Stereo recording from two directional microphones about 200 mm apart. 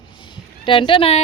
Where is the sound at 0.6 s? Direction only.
25° left (ahead or behind).